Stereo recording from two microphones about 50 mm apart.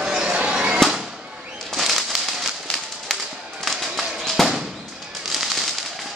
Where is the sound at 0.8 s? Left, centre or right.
Centre.